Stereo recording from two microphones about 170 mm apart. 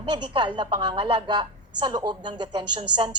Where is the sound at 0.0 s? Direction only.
25° right (ahead or behind).